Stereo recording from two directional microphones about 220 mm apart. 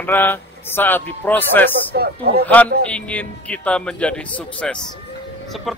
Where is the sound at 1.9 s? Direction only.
45° right (ahead or behind).